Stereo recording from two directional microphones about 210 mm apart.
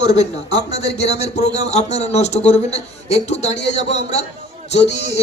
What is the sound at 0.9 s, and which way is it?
Speech, 30° left (ahead or behind).